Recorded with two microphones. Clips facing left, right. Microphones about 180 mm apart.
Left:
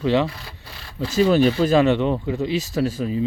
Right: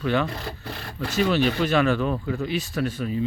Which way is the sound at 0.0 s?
25° left (ahead or behind).